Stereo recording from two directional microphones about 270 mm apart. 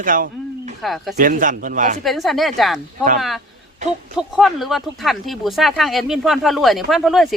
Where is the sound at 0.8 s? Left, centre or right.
Centre.